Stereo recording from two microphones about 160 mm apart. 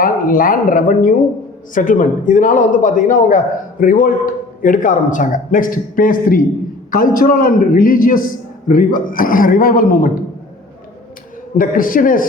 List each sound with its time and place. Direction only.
0.0 s a man's voice: 60° left (ahead or behind)
11.5 s a man's voice: 60° left (ahead or behind)